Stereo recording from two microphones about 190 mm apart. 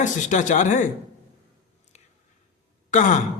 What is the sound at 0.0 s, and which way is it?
Speech, 40° left (ahead or behind).